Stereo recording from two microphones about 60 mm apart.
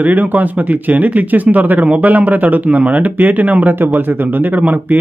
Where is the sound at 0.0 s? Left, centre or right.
Right.